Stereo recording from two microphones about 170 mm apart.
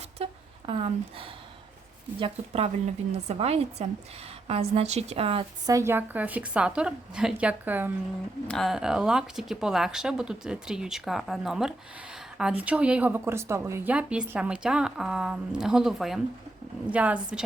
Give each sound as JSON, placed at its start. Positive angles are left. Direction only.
{"t": 0.2, "sound": "a sound", "side_deg": -35}
{"t": 2.1, "sound": "a woman's voice", "side_deg": -35}
{"t": 5.6, "sound": "a woman's voice", "side_deg": -15}
{"t": 8.4, "sound": "a woman's voice", "side_deg": 0}